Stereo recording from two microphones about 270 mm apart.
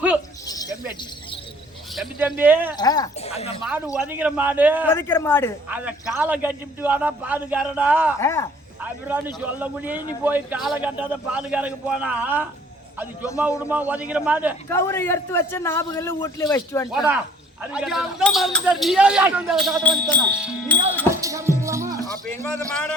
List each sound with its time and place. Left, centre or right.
0.4 s a sound: centre
2.0 s speech: centre
2.7 s speech: centre
3.6 s speech: centre
4.9 s a man's voice: centre
5.6 s speech: centre
8.2 s a man's voice: centre
8.8 s speech: centre
13.6 s speech: centre
14.7 s a man's voice: centre
16.9 s speech: centre
21.6 s music: centre
22.7 s speech: centre